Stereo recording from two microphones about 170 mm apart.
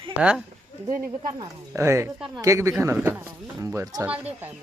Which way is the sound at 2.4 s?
15° right (ahead or behind).